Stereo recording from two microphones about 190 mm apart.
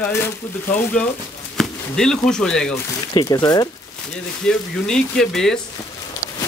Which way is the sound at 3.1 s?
20° left (ahead or behind).